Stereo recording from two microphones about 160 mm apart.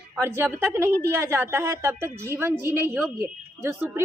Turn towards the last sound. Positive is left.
turn(degrees=-15)  # may be behind; listen again after turning